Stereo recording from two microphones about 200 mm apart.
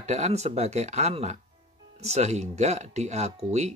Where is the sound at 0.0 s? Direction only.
35° right (ahead or behind).